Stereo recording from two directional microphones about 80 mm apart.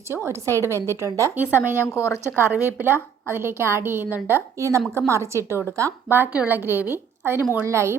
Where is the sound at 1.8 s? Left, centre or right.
Left.